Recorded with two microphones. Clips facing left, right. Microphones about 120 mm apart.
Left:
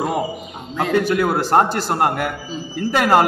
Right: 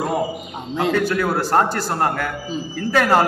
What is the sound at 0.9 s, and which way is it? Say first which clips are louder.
A man's voice: left 5 dB; 15° left (ahead or behind).